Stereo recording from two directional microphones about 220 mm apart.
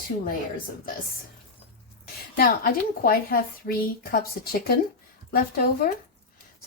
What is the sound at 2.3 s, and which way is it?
A woman's voice, 40° left (ahead or behind).